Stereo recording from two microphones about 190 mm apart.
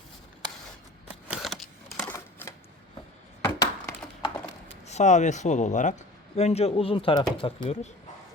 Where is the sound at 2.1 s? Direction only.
15° left (ahead or behind).